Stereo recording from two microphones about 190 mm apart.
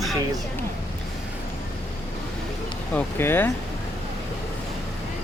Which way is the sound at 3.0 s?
10° left (ahead or behind).